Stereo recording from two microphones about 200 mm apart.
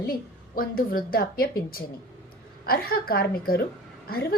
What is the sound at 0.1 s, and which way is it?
A woman's voice, 45° left (ahead or behind).